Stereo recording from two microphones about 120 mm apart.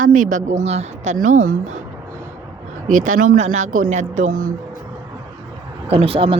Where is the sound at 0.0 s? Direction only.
90° right.